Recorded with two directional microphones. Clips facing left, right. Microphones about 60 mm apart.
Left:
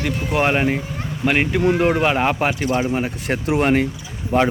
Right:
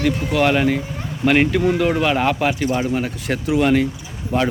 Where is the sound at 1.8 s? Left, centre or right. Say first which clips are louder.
Left 1 dB; left.